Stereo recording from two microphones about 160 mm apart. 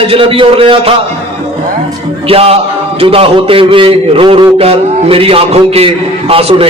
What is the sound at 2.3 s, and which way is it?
A man's voice, 35° right (ahead or behind).